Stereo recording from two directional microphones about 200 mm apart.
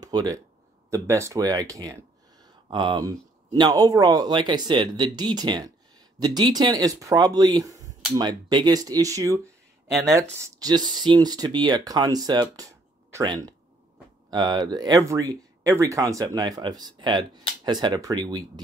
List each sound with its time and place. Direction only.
0.0 s speech: 20° right (ahead or behind)
10.4 s speech: 15° right (ahead or behind)